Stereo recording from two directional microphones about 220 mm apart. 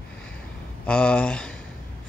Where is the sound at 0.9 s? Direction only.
5° left (ahead or behind).